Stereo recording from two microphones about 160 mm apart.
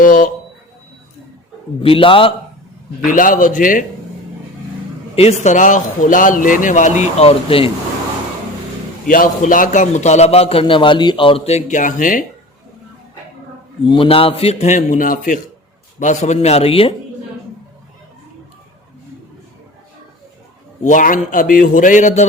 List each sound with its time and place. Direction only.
0.0 s speech: 55° left (ahead or behind)
1.8 s a man's voice: 35° left (ahead or behind)
3.1 s a man's voice: 55° left (ahead or behind)
5.1 s speech: 45° left (ahead or behind)
9.0 s a man's voice: 60° left (ahead or behind); by 11.3 s 30° left (ahead or behind)
11.4 s speech: 45° left (ahead or behind)
13.9 s a man's voice: 35° left (ahead or behind)
20.8 s a man's voice: 55° left (ahead or behind)